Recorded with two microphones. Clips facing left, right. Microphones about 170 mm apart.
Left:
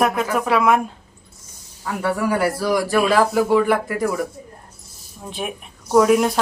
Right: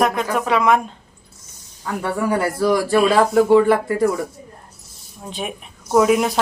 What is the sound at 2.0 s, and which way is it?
Speech, 25° right (ahead or behind).